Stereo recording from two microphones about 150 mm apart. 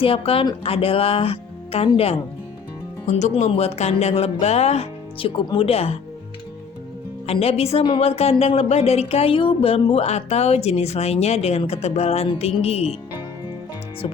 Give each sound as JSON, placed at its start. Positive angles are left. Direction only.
{"t": 0.0, "sound": "speech", "side_deg": 40}
{"t": 7.3, "sound": "speech", "side_deg": 40}